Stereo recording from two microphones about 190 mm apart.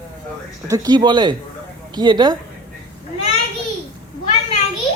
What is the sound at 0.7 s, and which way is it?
A child's voice, 20° right (ahead or behind).